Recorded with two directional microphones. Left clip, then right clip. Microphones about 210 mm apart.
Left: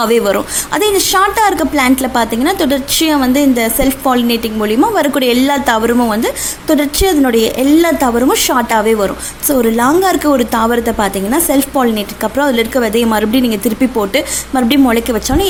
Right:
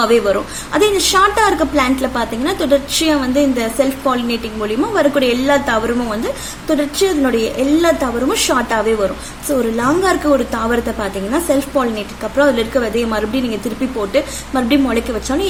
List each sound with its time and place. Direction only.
0.0 s a woman's voice: 40° left (ahead or behind)